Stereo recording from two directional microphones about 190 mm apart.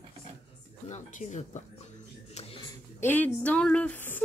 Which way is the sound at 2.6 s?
10° left (ahead or behind).